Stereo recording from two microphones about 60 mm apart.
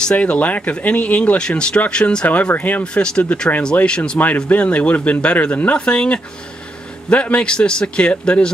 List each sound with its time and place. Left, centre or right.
0.1 s a man's voice: left
2.2 s speech: left
2.8 s a man's voice: centre